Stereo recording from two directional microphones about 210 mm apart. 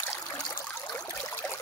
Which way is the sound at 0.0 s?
15° left (ahead or behind).